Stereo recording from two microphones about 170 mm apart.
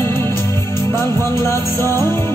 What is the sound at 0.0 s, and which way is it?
Music, 15° left (ahead or behind).